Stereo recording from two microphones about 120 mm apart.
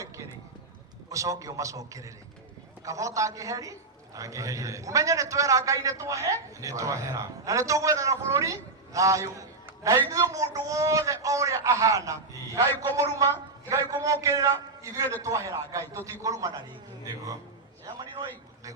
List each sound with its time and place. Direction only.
1.1 s a man's voice: 25° right (ahead or behind)